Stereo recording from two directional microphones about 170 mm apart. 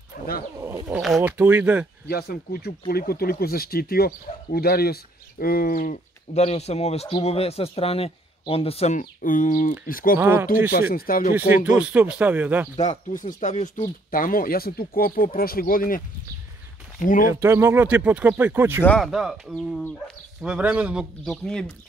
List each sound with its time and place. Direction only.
0.2 s roaring cats: 50° left (ahead or behind)
0.6 s speech: 15° right (ahead or behind)
2.0 s speech: 65° left (ahead or behind)
10.1 s speech: 10° right (ahead or behind)
10.7 s speech: 60° left (ahead or behind)
11.3 s speech: 10° right (ahead or behind)
13.4 s speech: 45° left (ahead or behind)
17.0 s speech: 50° left (ahead or behind)
17.3 s speech: 15° right (ahead or behind)
18.9 s speech: centre (ahead or behind)